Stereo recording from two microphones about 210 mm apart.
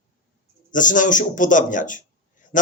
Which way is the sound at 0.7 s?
40° left (ahead or behind).